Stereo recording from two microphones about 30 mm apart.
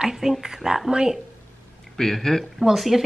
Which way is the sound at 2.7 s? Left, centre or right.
Centre.